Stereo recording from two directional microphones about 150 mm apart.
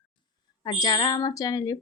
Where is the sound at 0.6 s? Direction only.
30° left (ahead or behind).